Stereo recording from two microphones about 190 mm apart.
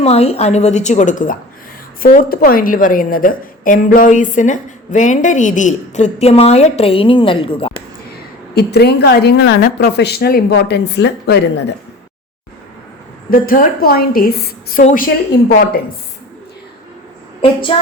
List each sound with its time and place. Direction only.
0.0 s a woman's voice: 30° left (ahead or behind)
8.5 s a woman's voice: 60° left (ahead or behind)
13.3 s a woman's voice: 45° left (ahead or behind)
14.8 s a woman's voice: 40° left (ahead or behind)
17.4 s a woman's voice: 25° left (ahead or behind)